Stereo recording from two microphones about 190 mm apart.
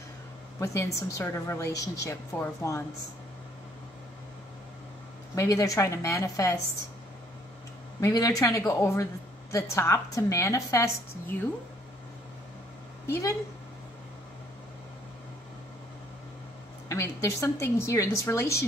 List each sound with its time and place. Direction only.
0.9 s a woman's voice: 15° left (ahead or behind)
5.3 s a woman's voice: 15° left (ahead or behind)
8.0 s a woman's voice: 20° left (ahead or behind)
13.0 s a woman's voice: 15° left (ahead or behind)
16.9 s a woman's voice: 15° left (ahead or behind)